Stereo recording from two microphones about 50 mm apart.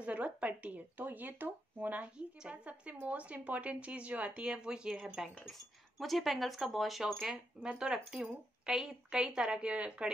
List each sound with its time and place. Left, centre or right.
0.0 s a sound: right
2.1 s speech: right
5.9 s speech: centre
7.2 s speech: centre